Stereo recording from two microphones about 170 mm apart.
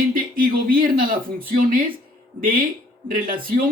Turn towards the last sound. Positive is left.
turn(degrees=-55)  # may be behind; listen again after turning